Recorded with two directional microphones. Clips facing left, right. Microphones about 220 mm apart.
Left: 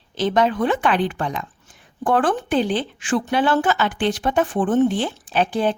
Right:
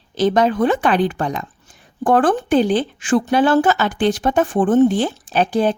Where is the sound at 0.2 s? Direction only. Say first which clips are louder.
Right 4 dB; 40° right (ahead or behind).